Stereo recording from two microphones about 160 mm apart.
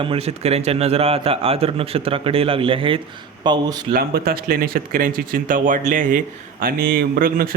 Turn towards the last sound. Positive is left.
turn(degrees=-65)  # may be behind; listen again after turning